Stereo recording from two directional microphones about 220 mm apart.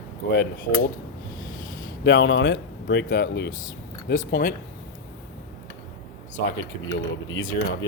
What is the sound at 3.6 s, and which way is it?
Speech, 35° left (ahead or behind).